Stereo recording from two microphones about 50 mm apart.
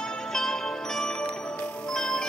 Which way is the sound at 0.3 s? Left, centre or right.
Centre.